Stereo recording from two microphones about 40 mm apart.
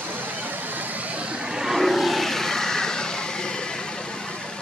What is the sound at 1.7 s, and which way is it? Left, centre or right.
Vehicle, centre.